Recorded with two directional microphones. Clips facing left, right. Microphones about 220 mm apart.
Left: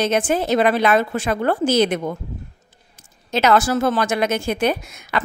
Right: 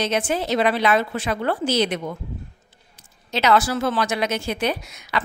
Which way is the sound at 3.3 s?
45° left (ahead or behind).